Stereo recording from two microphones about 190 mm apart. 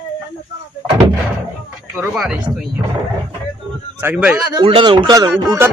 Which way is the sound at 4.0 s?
10° right (ahead or behind).